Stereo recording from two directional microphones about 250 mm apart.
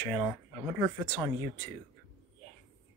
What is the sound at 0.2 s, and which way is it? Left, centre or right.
Speech, centre.